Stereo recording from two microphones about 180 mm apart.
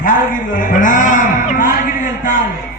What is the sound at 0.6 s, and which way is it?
Music, 45° left (ahead or behind).